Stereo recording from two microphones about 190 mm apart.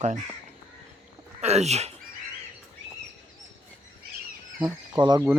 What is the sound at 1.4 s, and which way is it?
Speech, 35° right (ahead or behind).